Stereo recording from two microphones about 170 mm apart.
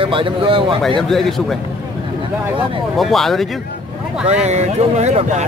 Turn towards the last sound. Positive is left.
turn(degrees=-40)  # may be behind; listen again after turning